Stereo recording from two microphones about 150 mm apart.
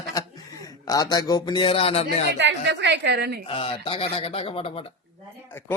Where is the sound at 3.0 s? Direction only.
90° right.